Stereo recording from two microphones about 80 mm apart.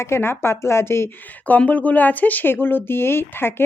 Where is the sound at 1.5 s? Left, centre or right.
Centre.